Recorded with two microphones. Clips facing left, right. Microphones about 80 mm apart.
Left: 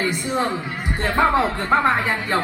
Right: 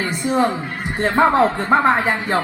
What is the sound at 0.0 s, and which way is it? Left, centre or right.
A woman's voice, right.